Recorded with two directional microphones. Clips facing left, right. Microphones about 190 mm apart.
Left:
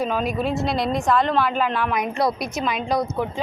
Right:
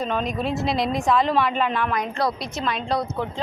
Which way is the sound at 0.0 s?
5° left (ahead or behind).